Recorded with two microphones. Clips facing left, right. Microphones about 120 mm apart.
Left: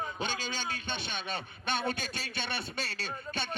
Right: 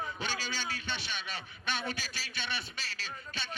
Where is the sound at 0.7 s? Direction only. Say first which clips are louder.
Left 2 dB; 50° left (ahead or behind).